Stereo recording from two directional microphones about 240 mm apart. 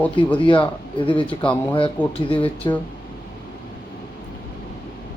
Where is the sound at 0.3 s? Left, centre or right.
Left.